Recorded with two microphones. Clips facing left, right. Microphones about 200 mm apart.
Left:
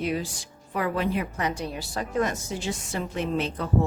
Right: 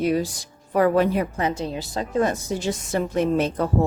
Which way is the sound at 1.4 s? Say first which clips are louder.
Right 4 dB; 25° right (ahead or behind).